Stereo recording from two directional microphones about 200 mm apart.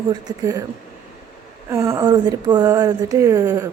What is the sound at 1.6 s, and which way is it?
Speech, 15° right (ahead or behind).